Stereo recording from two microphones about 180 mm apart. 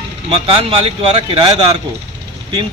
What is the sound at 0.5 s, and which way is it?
Speech, 30° right (ahead or behind).